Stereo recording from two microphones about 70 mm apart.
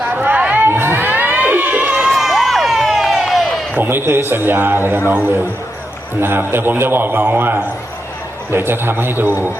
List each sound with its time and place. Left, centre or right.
0.1 s a sound: right
2.0 s crowd: centre
3.8 s a man's voice: right